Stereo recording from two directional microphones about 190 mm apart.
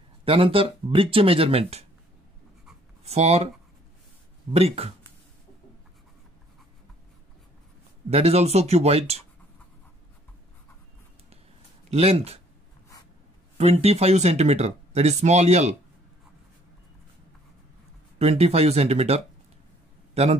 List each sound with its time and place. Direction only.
0.2 s speech: 30° right (ahead or behind)
3.1 s speech: 35° right (ahead or behind)
4.5 s speech: 30° right (ahead or behind)
8.1 s speech: 35° right (ahead or behind)
11.9 s speech: 30° right (ahead or behind)
13.6 s speech: 35° right (ahead or behind)
18.2 s speech: 35° right (ahead or behind)